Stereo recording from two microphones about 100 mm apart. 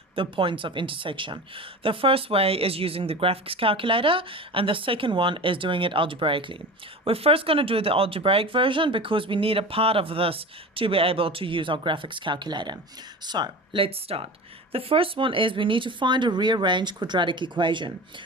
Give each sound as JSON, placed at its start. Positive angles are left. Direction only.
{"t": 0.2, "sound": "speech", "side_deg": -60}
{"t": 7.0, "sound": "speech", "side_deg": -70}
{"t": 13.8, "sound": "speech", "side_deg": -75}